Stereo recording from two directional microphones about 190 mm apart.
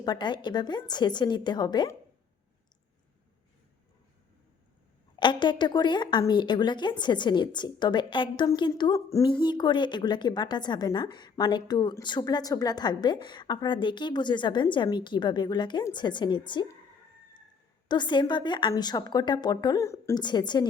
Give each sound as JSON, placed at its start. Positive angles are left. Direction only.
{"t": 0.0, "sound": "a woman's voice", "side_deg": 25}
{"t": 5.2, "sound": "a woman's voice", "side_deg": 25}
{"t": 17.8, "sound": "a woman's voice", "side_deg": 25}